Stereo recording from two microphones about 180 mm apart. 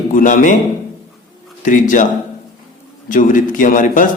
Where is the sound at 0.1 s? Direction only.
45° left (ahead or behind).